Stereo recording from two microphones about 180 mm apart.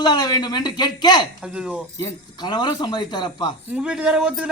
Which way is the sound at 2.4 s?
25° left (ahead or behind).